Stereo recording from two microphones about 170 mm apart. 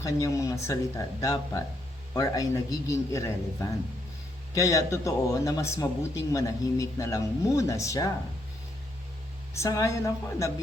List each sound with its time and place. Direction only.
0.0 s speech: 20° left (ahead or behind)
9.6 s speech: 20° left (ahead or behind)